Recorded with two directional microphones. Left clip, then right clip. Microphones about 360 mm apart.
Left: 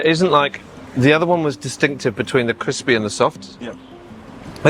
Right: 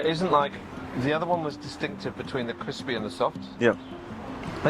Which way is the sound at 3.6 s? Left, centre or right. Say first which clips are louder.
Right 10 dB; right.